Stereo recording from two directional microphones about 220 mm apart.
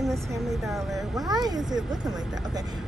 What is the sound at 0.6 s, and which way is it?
Speech, centre (ahead or behind).